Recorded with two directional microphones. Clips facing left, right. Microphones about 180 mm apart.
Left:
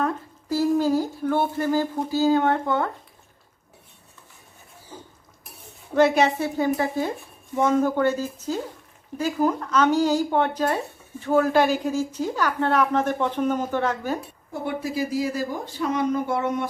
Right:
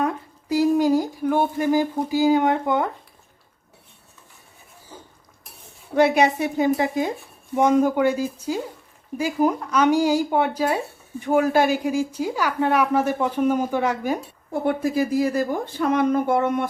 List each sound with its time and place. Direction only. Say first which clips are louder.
0.0 s speech: right 1 dB; 15° right (ahead or behind)
5.9 s a woman's voice: right 1 dB; 15° right (ahead or behind)
14.5 s speech: right 6 dB; 50° right (ahead or behind)